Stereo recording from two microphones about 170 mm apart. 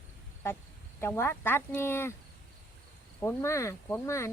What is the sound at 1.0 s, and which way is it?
Speech, 15° left (ahead or behind).